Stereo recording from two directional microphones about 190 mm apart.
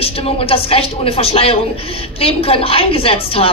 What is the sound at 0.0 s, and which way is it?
A woman's voice, 30° left (ahead or behind).